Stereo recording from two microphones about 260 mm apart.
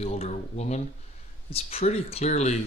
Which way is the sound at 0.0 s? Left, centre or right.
Left.